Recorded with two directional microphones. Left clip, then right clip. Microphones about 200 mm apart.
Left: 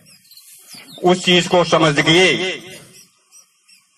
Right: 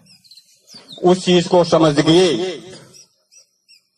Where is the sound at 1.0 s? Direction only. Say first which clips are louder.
Even; 35° right (ahead or behind).